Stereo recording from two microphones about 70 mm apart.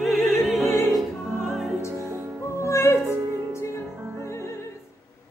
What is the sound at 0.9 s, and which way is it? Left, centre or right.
Music, centre.